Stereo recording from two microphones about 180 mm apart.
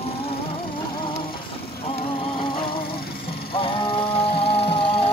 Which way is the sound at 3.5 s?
30° left (ahead or behind).